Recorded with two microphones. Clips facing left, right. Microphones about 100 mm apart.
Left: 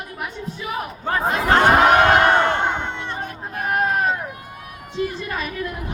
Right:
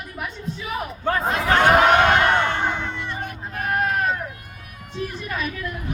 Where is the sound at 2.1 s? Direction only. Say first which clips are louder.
Left 3 dB; 35° left (ahead or behind).